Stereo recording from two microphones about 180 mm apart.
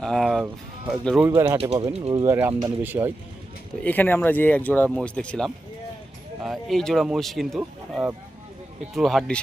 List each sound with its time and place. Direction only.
0.0 s speech: centre (ahead or behind)
1.7 s speech: 35° right (ahead or behind)
2.2 s speech: 15° right (ahead or behind)
2.8 s speech: 10° right (ahead or behind)
3.8 s speech: 10° left (ahead or behind)